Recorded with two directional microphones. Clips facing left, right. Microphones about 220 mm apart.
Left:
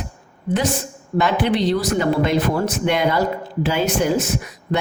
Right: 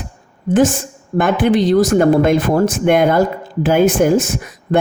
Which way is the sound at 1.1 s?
50° right (ahead or behind).